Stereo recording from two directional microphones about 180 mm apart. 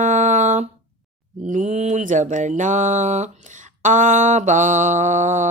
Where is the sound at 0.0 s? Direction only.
40° right (ahead or behind).